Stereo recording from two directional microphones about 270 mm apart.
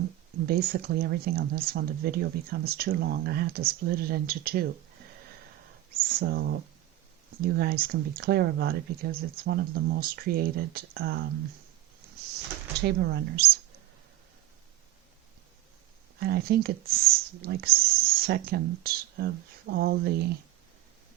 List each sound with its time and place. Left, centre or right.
0.4 s speech: right
6.0 s speech: right
12.8 s speech: right
16.2 s speech: right